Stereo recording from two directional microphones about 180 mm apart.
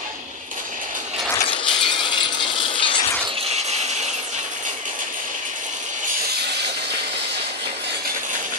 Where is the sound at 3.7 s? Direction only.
40° right (ahead or behind).